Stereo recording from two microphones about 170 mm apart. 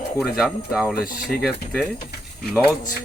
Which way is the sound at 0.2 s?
Centre (ahead or behind).